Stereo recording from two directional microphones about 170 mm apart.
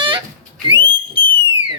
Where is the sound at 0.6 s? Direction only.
30° right (ahead or behind).